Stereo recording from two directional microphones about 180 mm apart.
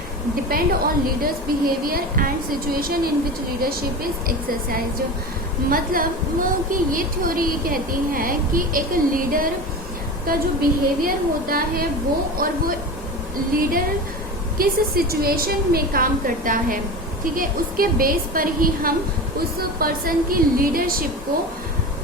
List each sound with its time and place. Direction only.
0.5 s a woman's voice: 55° right (ahead or behind)
13.6 s a woman's voice: 50° right (ahead or behind)